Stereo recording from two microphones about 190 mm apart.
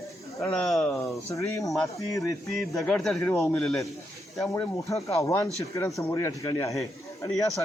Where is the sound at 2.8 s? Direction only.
5° left (ahead or behind).